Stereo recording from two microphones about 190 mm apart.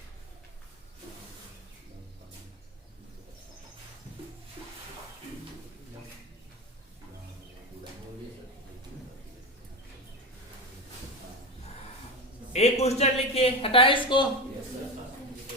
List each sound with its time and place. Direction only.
12.5 s a man's voice: 35° left (ahead or behind)